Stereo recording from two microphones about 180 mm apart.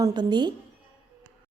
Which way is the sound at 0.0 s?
25° right (ahead or behind).